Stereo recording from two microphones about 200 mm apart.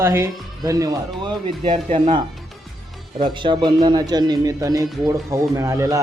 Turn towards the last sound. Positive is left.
turn(degrees=-15)  # may be behind; listen again after turning